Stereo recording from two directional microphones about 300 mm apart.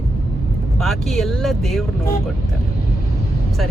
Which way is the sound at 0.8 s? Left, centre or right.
Centre.